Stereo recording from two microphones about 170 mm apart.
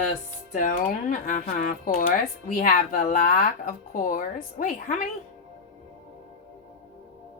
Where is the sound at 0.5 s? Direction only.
50° left (ahead or behind).